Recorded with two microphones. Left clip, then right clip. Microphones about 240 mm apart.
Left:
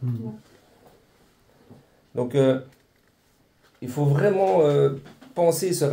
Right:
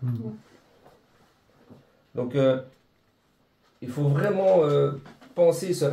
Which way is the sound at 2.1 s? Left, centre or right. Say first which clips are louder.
Left 2 dB; left.